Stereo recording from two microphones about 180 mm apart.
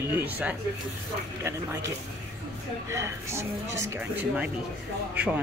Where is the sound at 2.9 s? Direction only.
15° right (ahead or behind).